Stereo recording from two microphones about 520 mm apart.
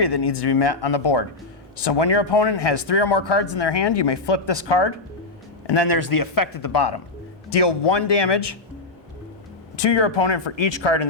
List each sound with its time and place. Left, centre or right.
0.0 s speech: left
9.7 s speech: left